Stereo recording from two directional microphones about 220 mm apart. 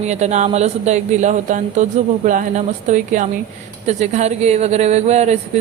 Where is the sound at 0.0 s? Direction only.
30° right (ahead or behind).